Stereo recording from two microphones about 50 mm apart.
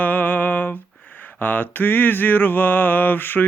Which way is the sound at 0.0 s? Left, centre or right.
Left.